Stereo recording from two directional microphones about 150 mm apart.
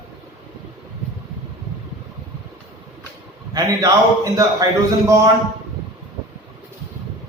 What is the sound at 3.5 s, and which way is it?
Speech, 25° right (ahead or behind).